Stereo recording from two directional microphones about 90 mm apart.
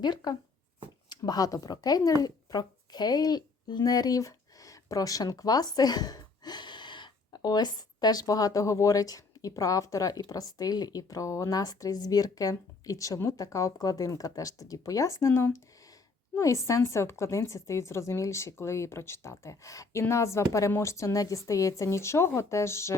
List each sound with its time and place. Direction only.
0.0 s speech: 55° left (ahead or behind)
7.3 s speech: 50° left (ahead or behind); by 23.0 s 30° left (ahead or behind)